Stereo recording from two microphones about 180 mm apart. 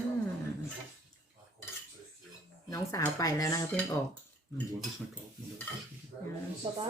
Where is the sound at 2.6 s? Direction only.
15° left (ahead or behind).